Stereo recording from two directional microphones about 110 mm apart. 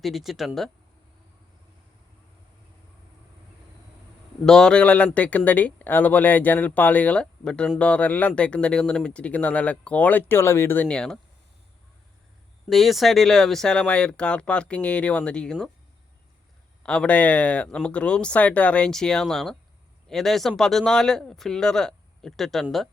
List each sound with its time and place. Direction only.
0.0 s speech: centre (ahead or behind)
4.4 s speech: 5° left (ahead or behind); by 10.8 s 20° left (ahead or behind)
10.8 s speech: 10° left (ahead or behind)
12.6 s speech: centre (ahead or behind)
16.8 s speech: 10° left (ahead or behind)